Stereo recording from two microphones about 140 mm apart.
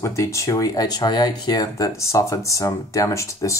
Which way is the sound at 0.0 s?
20° left (ahead or behind).